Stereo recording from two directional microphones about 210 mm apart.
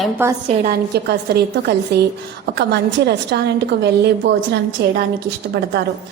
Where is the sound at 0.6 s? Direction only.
45° right (ahead or behind).